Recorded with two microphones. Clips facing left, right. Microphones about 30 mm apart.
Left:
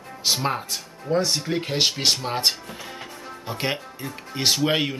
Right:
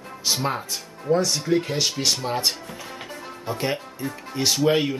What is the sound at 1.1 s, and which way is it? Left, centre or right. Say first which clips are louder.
Speech: right 2 dB; left.